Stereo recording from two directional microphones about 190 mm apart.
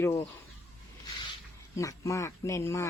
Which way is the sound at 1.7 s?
15° left (ahead or behind).